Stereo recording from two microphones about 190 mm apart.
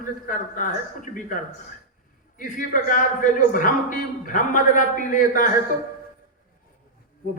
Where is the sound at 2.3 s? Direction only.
45° left (ahead or behind).